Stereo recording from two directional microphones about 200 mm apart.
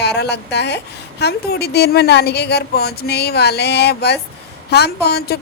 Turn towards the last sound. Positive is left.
turn(degrees=55)  # may be behind; listen again after turning